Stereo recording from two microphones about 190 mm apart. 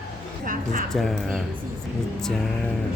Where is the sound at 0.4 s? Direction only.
45° right (ahead or behind).